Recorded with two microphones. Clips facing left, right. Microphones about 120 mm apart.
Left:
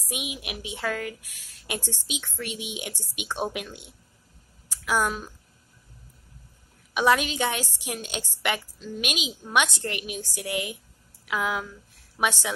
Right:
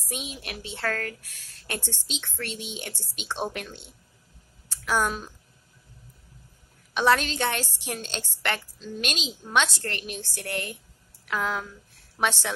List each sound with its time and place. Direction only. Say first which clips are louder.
0.1 s a woman's voice: left 1 dB; 15° left (ahead or behind)
6.9 s a woman's voice: even; 10° left (ahead or behind)